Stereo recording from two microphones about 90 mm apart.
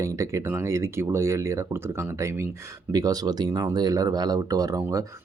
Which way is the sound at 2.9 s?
40° right (ahead or behind).